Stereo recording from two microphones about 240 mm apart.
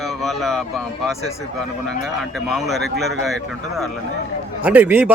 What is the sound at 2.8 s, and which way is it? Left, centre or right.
Speech, right.